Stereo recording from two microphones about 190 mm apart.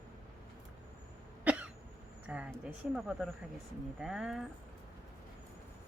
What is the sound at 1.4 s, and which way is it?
Cough, 5° right (ahead or behind).